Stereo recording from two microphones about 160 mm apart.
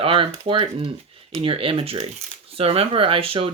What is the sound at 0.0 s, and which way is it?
Speech, 35° right (ahead or behind).